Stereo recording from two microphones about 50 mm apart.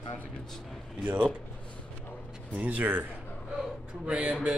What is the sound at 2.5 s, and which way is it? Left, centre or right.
Speech, right.